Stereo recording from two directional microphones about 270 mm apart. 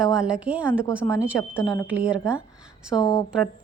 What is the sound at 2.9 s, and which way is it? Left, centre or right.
Speech, centre.